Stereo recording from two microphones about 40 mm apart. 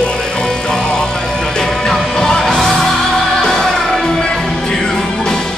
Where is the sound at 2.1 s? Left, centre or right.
Centre.